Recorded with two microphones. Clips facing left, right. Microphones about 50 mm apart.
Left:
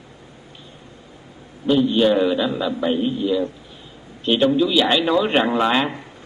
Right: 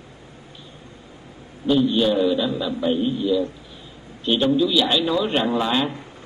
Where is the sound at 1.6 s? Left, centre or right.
Centre.